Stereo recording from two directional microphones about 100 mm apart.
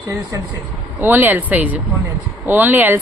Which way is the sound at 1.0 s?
20° right (ahead or behind).